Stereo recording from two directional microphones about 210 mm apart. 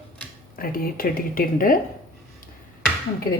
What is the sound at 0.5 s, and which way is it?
Speech, 45° left (ahead or behind).